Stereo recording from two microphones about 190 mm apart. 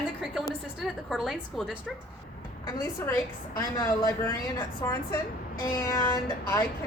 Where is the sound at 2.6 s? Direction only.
20° left (ahead or behind).